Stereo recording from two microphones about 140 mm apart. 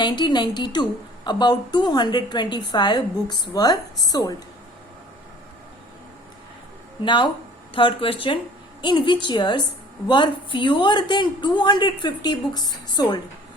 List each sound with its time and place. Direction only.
0.0 s a woman's voice: 30° left (ahead or behind)
7.0 s a woman's voice: 35° left (ahead or behind)